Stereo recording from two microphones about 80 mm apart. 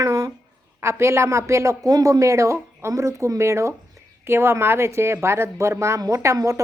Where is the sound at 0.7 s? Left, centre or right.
Right.